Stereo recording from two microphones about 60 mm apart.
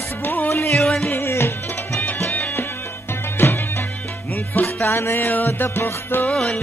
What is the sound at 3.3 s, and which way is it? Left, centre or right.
Music, left.